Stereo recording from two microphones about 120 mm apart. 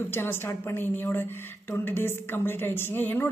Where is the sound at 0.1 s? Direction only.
20° left (ahead or behind).